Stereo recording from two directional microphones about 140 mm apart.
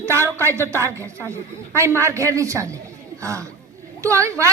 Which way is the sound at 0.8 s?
20° right (ahead or behind).